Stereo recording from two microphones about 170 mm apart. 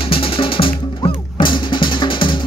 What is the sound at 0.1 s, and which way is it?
Music, 30° left (ahead or behind).